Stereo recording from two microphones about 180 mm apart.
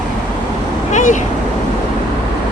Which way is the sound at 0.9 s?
45° left (ahead or behind).